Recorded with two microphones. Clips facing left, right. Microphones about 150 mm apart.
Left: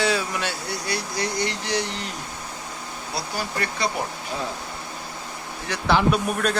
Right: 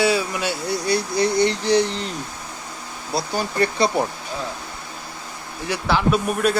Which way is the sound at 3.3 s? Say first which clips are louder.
Right 8 dB; 30° right (ahead or behind).